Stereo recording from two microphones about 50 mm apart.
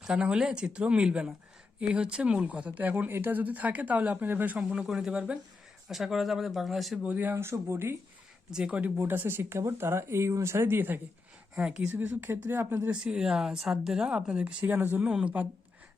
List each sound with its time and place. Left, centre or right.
0.0 s speech: centre; by 4.5 s right
4.8 s speech: centre
7.3 s speech: right
8.4 s speech: centre
9.0 s speech: right
11.5 s speech: centre
11.9 s speech: right
12.9 s speech: centre
14.6 s speech: right
14.9 s speech: right